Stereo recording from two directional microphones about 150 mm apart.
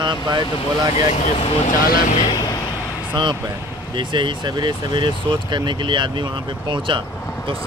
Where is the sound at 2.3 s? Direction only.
25° left (ahead or behind).